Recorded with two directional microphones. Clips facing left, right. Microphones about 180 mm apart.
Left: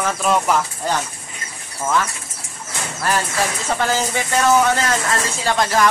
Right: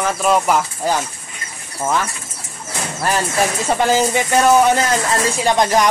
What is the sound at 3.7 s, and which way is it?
Speech, 15° right (ahead or behind).